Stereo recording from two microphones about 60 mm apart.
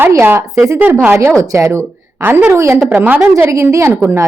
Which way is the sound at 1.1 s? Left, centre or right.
Right.